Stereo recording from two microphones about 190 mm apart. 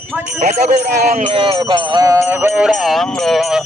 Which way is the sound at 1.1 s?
30° right (ahead or behind).